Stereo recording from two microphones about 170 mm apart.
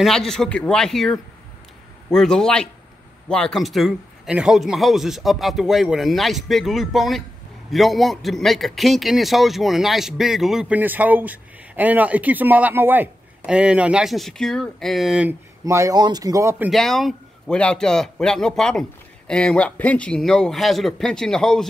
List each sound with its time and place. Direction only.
0.0 s a man's voice: centre (ahead or behind)
15.6 s speech: 20° right (ahead or behind)
16.7 s a man's voice: centre (ahead or behind)